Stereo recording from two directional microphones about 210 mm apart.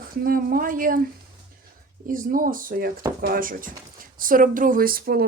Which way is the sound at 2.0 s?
40° right (ahead or behind).